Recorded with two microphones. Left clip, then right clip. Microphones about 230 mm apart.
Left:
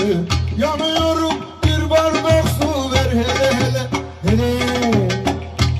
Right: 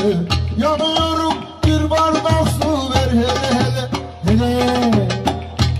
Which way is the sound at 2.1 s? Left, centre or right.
Left.